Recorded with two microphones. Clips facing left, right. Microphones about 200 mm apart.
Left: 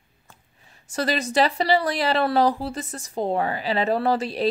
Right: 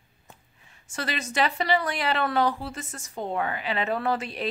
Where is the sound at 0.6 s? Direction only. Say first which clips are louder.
Left 8 dB; 35° left (ahead or behind).